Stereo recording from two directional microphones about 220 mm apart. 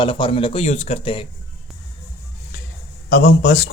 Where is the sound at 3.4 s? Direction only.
45° left (ahead or behind).